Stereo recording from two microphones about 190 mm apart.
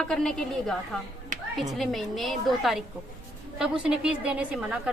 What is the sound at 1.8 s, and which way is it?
A woman's voice, centre (ahead or behind).